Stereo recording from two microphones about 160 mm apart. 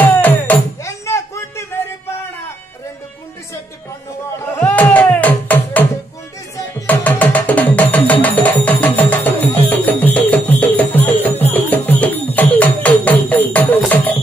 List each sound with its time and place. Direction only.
0.0 s music: 10° left (ahead or behind)
4.6 s music: 10° left (ahead or behind)